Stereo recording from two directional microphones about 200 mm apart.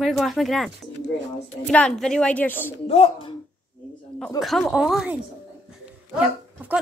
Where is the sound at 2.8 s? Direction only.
30° left (ahead or behind).